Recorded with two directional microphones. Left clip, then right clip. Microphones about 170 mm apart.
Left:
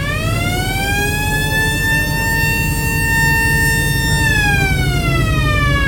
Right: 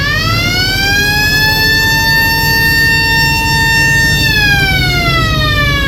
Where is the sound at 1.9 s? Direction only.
60° left (ahead or behind); by 3.9 s 35° left (ahead or behind).